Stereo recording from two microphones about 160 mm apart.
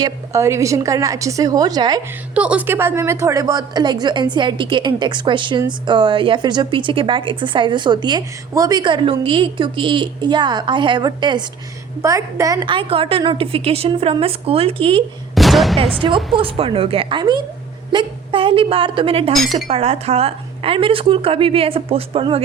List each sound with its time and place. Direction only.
0.0 s a woman's voice: 15° right (ahead or behind)
2.3 s a woman's voice: 10° right (ahead or behind)
12.6 s speech: 35° right (ahead or behind)
15.4 s speech: centre (ahead or behind)
15.8 s speech: 35° right (ahead or behind)